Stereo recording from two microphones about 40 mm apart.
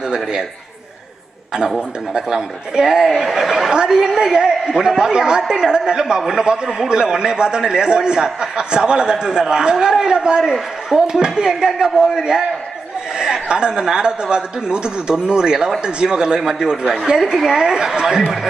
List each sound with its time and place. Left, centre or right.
0.1 s a man's voice: centre
2.1 s a man's voice: centre